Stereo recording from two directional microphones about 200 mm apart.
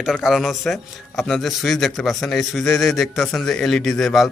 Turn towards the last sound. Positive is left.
turn(degrees=0)  # may be behind; listen again after turning